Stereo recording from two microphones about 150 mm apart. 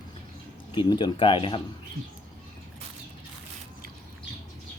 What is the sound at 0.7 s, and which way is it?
Speech, 30° left (ahead or behind).